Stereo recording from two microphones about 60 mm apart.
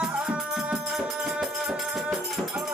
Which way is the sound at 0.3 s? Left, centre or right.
Centre.